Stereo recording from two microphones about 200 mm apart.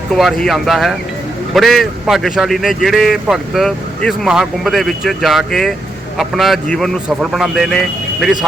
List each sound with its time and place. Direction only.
0.2 s speech: centre (ahead or behind)